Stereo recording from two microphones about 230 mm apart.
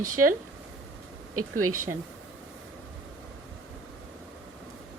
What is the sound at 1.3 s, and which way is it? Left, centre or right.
Speech, right.